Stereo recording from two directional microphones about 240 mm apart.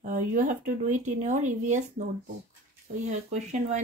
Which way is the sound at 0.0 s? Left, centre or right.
Right.